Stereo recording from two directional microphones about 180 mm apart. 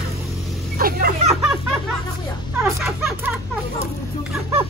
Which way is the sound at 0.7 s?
55° right (ahead or behind).